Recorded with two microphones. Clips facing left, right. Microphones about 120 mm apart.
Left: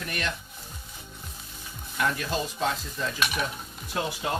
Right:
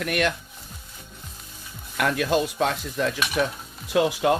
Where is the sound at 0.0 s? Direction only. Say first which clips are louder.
Right 8 dB; 85° right.